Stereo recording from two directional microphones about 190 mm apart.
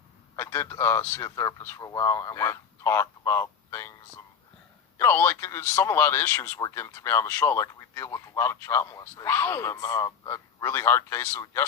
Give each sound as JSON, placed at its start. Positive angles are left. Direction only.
{"t": 0.3, "sound": "speech", "side_deg": 15}
{"t": 4.9, "sound": "speech", "side_deg": 10}